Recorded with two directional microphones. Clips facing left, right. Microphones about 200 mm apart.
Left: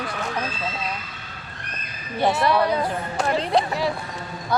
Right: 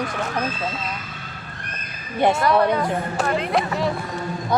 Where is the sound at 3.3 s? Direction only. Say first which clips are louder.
Left 2 dB; 30° left (ahead or behind).